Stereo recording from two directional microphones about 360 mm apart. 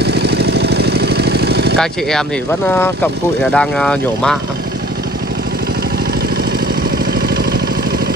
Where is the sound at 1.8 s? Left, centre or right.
Centre.